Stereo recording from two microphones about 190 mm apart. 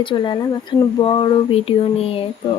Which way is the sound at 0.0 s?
25° left (ahead or behind).